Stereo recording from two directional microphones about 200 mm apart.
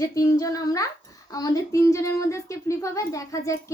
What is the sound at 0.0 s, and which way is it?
Speech, 15° left (ahead or behind).